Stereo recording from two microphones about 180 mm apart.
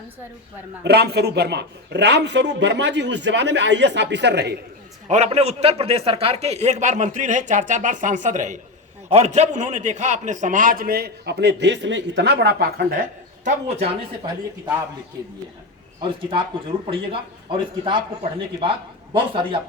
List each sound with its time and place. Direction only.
0.9 s a man's voice: 65° right (ahead or behind)
5.0 s a man's voice: 40° right (ahead or behind)
13.7 s speech: 35° right (ahead or behind)
16.8 s a man's voice: 30° right (ahead or behind)